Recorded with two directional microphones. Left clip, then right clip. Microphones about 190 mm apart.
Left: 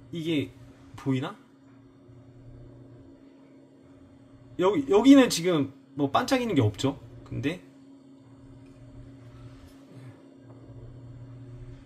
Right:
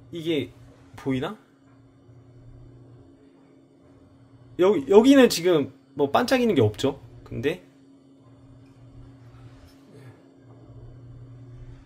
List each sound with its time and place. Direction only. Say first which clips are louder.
0.1 s a man's voice: right 3 dB; 35° right (ahead or behind)
4.6 s speech: right 6 dB; 40° right (ahead or behind)